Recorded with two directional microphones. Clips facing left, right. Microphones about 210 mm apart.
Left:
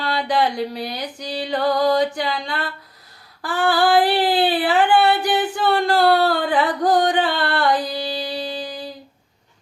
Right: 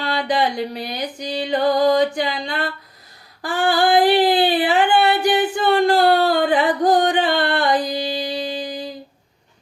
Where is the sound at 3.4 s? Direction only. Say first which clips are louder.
Even; 20° right (ahead or behind).